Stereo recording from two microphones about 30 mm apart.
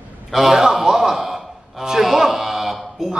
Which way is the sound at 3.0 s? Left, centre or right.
Centre.